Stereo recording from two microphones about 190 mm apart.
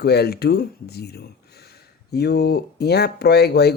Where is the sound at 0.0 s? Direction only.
60° left (ahead or behind).